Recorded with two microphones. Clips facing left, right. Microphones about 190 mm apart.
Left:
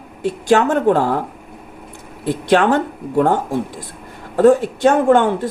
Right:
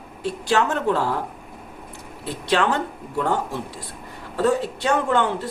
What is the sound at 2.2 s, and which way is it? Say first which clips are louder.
A woman's voice: left 7 dB; 50° left (ahead or behind).